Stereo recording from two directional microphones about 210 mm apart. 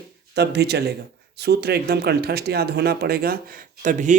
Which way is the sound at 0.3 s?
50° right (ahead or behind).